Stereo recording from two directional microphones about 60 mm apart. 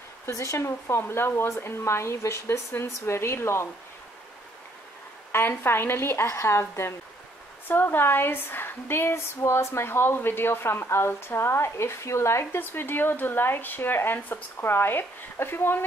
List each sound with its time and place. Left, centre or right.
0.3 s speech: left
5.3 s speech: left
7.6 s speech: left
12.5 s speech: left